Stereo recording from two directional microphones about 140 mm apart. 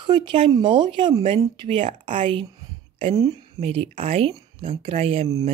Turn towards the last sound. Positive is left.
turn(degrees=-45)  # may be behind; listen again after turning